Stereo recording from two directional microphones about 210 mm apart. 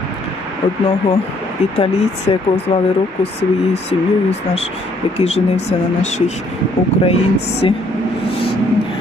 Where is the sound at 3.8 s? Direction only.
30° left (ahead or behind).